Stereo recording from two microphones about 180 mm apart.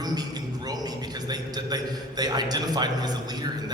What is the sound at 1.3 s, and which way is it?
A man's voice, 20° right (ahead or behind).